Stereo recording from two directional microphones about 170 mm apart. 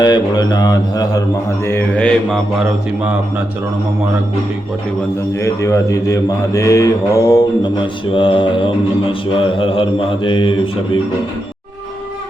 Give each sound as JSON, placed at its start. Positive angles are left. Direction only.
{"t": 0.0, "sound": "mantra", "side_deg": 25}
{"t": 1.6, "sound": "mantra", "side_deg": 10}
{"t": 5.4, "sound": "mantra", "side_deg": 15}